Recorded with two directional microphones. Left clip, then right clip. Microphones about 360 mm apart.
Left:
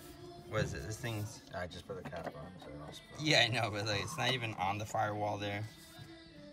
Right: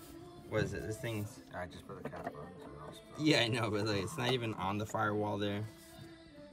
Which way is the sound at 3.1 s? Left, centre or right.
Centre.